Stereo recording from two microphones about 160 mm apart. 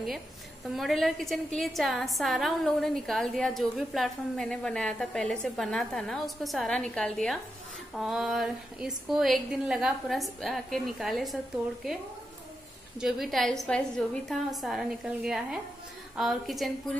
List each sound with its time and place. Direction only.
0.7 s a woman's voice: centre (ahead or behind)
13.0 s a woman's voice: centre (ahead or behind)